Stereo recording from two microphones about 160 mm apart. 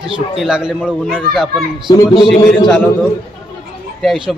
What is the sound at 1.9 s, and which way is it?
Speech, 30° left (ahead or behind).